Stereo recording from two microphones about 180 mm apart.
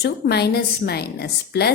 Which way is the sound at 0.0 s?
65° left (ahead or behind).